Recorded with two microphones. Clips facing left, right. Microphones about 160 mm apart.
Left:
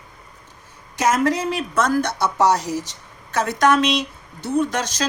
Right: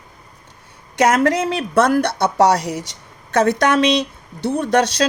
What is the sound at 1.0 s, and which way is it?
A woman's voice, 65° right (ahead or behind).